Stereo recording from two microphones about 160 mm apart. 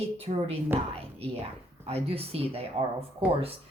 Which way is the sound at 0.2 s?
40° right (ahead or behind).